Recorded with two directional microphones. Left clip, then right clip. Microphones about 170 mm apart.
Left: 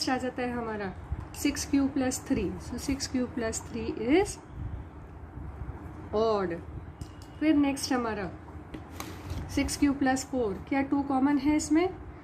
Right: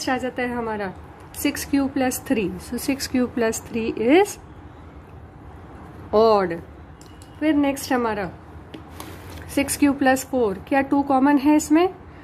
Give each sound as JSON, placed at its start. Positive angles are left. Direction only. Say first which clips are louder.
{"t": 0.0, "sound": "a woman's voice", "louder": "right 6 dB", "side_deg": -30}
{"t": 6.1, "sound": "a woman's voice", "louder": "right 11 dB", "side_deg": -45}
{"t": 9.5, "sound": "a woman's voice", "louder": "right 8 dB", "side_deg": -40}